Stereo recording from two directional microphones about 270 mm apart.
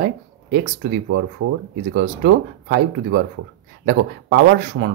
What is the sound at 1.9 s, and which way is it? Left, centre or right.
Speech, right.